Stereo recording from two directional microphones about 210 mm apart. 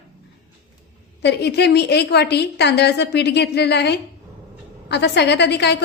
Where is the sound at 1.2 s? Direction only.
55° left (ahead or behind).